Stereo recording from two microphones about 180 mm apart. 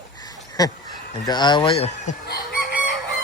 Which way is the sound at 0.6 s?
20° left (ahead or behind).